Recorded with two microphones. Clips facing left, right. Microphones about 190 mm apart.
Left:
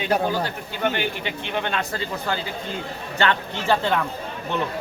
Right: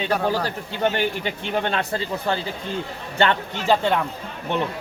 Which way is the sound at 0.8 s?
40° right (ahead or behind).